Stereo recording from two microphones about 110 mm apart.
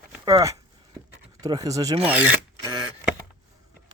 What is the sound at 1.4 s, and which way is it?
Speech, 35° right (ahead or behind).